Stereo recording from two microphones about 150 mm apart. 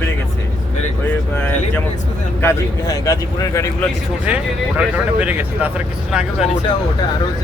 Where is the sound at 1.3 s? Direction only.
15° left (ahead or behind).